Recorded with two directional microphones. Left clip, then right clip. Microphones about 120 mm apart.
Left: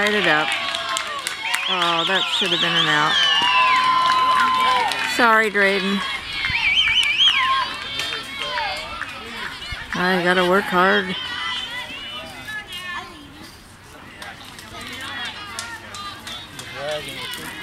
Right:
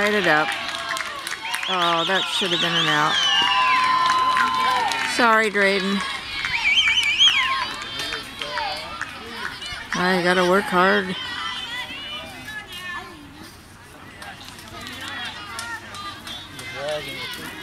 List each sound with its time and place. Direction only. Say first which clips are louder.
0.1 s speech: left 1 dB; 5° left (ahead or behind)
0.6 s run: left 3 dB; 15° left (ahead or behind)
1.7 s speech: even; 5° left (ahead or behind)
2.3 s a sound: left 2 dB; 5° left (ahead or behind)
4.5 s run: left 2 dB; 5° left (ahead or behind)
7.0 s car alarm: left 1 dB; 5° right (ahead or behind)
8.1 s run: left 3 dB; centre (ahead or behind)
9.9 s a child's voice: left 1 dB; 5° left (ahead or behind)
15.1 s a sound: left 2 dB; 5° left (ahead or behind)
16.7 s run: even; centre (ahead or behind)